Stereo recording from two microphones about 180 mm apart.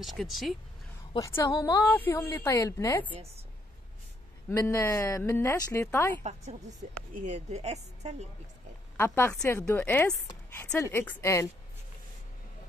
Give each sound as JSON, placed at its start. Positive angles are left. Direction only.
{"t": 0.0, "sound": "speech", "side_deg": 0}
{"t": 1.1, "sound": "a woman's voice", "side_deg": 15}
{"t": 4.5, "sound": "a woman's voice", "side_deg": 15}
{"t": 7.2, "sound": "a woman's voice", "side_deg": -40}
{"t": 8.9, "sound": "a woman's voice", "side_deg": 10}